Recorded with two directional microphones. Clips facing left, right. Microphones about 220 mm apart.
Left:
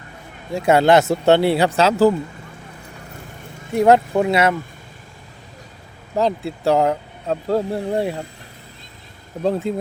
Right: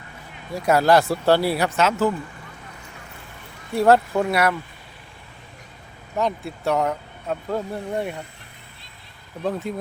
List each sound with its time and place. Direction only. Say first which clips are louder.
0.5 s speech: left 3 dB; 25° left (ahead or behind)
3.7 s speech: left 3 dB; 20° left (ahead or behind)
6.1 s speech: left 5 dB; 30° left (ahead or behind)
9.4 s speech: left 6 dB; 25° left (ahead or behind)